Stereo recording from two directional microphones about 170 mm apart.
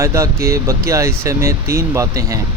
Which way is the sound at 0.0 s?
15° right (ahead or behind).